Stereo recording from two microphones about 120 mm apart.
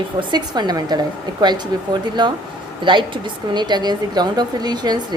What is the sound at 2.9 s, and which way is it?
A woman's voice, 40° right (ahead or behind).